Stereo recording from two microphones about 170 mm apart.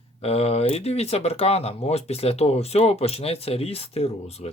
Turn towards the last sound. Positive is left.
turn(degrees=35)  # may be behind; listen again after turning